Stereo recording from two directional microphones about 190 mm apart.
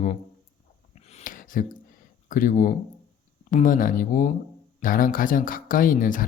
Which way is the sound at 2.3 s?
45° left (ahead or behind).